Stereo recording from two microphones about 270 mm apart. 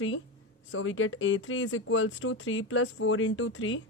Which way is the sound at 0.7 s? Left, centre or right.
Left.